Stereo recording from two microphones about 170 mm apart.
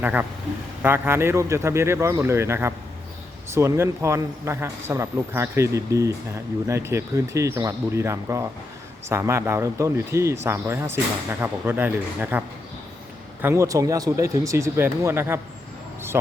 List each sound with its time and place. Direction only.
0.0 s speech: 10° right (ahead or behind)
13.4 s speech: 15° right (ahead or behind)